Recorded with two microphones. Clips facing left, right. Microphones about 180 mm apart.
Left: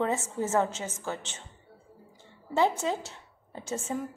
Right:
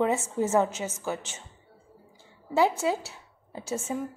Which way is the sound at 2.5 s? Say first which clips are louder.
Right 2 dB; 10° right (ahead or behind).